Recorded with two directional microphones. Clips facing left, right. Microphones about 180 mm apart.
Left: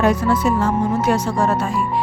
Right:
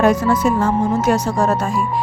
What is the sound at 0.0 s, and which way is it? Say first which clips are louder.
Speech: right 2 dB; 45° right (ahead or behind).